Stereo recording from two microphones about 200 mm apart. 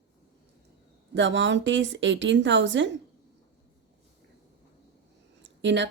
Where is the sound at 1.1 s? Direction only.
65° right (ahead or behind).